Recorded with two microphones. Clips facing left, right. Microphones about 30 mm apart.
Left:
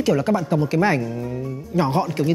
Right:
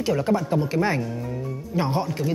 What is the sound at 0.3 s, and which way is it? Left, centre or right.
Speech, left.